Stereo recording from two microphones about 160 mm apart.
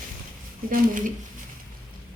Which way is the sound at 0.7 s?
55° right (ahead or behind).